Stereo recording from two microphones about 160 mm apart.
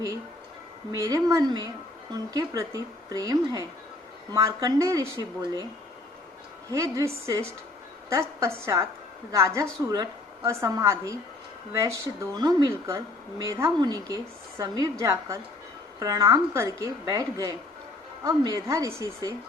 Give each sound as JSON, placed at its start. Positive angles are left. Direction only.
{"t": 0.9, "sound": "a woman's voice", "side_deg": -20}
{"t": 6.7, "sound": "a woman's voice", "side_deg": -20}